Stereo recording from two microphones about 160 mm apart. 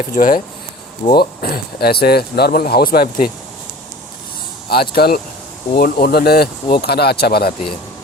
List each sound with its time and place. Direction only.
0.0 s speech: 55° left (ahead or behind)
1.1 s speech: 75° left (ahead or behind)
4.7 s speech: 75° left (ahead or behind)